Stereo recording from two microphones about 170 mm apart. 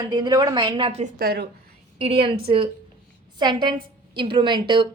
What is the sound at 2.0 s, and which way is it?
A woman's voice, 35° right (ahead or behind).